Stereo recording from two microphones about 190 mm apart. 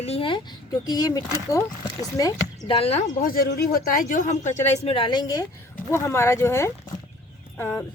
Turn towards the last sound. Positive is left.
turn(degrees=10)  # may be behind; listen again after turning